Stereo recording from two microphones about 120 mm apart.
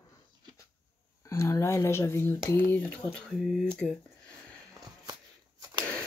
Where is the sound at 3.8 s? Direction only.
Centre (ahead or behind).